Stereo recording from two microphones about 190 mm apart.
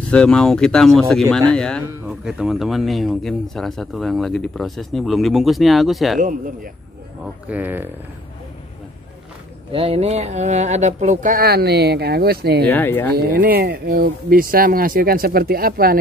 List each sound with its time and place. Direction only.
0.1 s speech: 5° left (ahead or behind)
7.4 s speech: 10° right (ahead or behind)
9.7 s speech: 30° right (ahead or behind); by 12.6 s 55° right (ahead or behind)
12.7 s speech: 10° left (ahead or behind)
13.3 s speech: 50° right (ahead or behind)